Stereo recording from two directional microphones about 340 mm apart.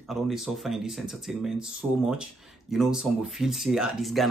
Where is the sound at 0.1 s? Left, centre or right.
Centre.